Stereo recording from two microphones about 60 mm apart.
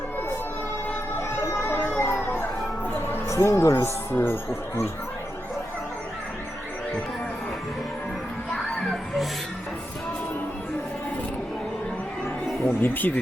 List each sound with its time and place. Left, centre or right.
1.4 s music: left
3.2 s speech: left
4.1 s speech: left
8.4 s music: centre
12.8 s speech: left